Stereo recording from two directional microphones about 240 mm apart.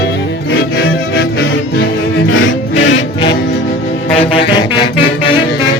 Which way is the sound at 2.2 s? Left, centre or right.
Left.